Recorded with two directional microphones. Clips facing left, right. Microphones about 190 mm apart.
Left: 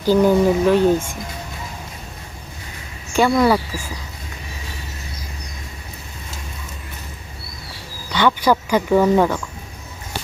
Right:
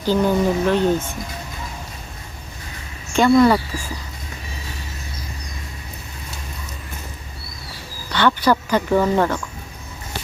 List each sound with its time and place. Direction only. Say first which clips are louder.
0.0 s speech: left 4 dB; 10° left (ahead or behind)
3.1 s speech: right 2 dB; 10° left (ahead or behind)
8.1 s speech: left 1 dB; 10° left (ahead or behind)